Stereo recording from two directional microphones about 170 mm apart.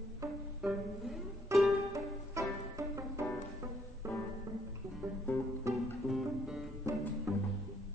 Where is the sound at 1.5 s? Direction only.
15° right (ahead or behind).